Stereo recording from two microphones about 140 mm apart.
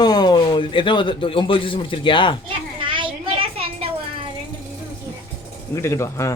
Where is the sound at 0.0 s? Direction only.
30° left (ahead or behind).